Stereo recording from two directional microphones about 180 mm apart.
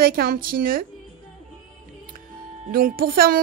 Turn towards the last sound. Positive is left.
turn(degrees=-55)  # may be behind; listen again after turning